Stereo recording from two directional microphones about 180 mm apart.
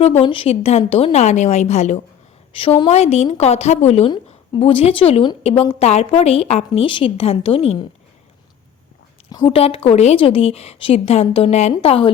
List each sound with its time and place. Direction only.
0.0 s a woman's voice: 30° left (ahead or behind)
2.5 s a woman's voice: 30° left (ahead or behind)
9.3 s a woman's voice: 20° left (ahead or behind)
9.6 s a woman's voice: 35° left (ahead or behind)